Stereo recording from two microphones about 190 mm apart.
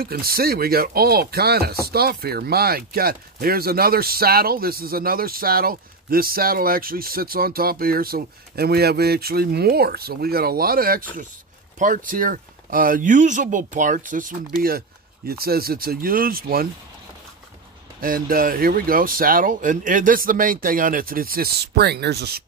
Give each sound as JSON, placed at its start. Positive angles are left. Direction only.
{"t": 0.0, "sound": "speech", "side_deg": -50}
{"t": 18.0, "sound": "speech", "side_deg": -50}